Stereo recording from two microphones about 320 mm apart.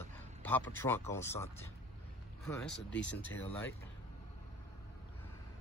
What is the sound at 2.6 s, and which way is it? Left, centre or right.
Speech, left.